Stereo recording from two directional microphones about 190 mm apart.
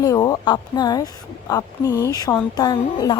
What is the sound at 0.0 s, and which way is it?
A woman's voice, 20° left (ahead or behind).